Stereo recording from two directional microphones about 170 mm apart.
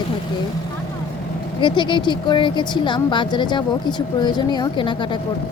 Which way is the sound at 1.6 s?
25° left (ahead or behind).